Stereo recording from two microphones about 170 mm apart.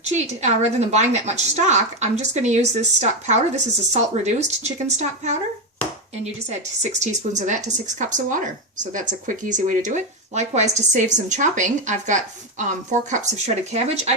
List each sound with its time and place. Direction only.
0.1 s speech: 45° right (ahead or behind)
7.0 s speech: 45° right (ahead or behind)